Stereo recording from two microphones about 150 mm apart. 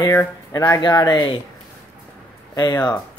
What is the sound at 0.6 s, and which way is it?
Speech, 25° left (ahead or behind).